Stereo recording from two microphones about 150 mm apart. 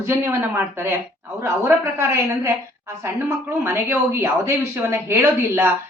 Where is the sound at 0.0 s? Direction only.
15° right (ahead or behind).